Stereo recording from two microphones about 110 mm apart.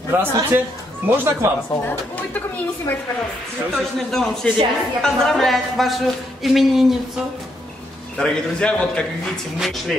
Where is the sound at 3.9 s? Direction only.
5° left (ahead or behind).